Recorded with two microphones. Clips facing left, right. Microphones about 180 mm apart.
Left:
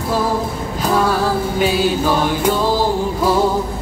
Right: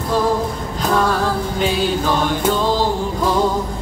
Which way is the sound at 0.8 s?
5° left (ahead or behind).